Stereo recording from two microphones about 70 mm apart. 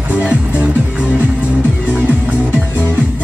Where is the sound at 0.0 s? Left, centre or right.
Centre.